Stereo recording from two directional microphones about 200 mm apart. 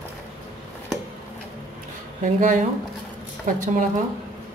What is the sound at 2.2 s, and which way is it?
Speech, 40° right (ahead or behind).